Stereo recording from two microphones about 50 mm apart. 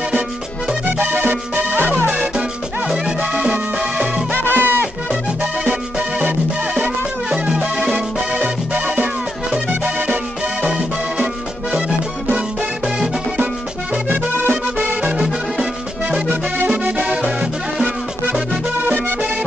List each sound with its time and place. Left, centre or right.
0.9 s music: right
3.8 s music: right
4.4 s music: right
5.4 s music: right
6.2 s music: right
7.2 s music: centre
7.9 s music: right
10.7 s music: centre
14.0 s music: right; by 17.5 s centre